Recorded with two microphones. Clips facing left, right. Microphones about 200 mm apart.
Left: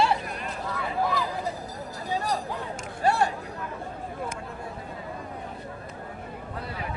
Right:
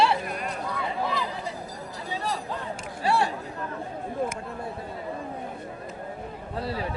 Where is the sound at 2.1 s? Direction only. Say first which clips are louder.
Left 2 dB; 45° left (ahead or behind).